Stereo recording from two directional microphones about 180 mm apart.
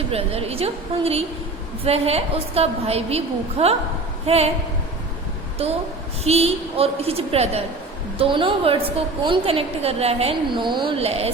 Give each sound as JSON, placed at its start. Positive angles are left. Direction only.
{"t": 0.1, "sound": "a woman's voice", "side_deg": -35}
{"t": 5.6, "sound": "a woman's voice", "side_deg": -35}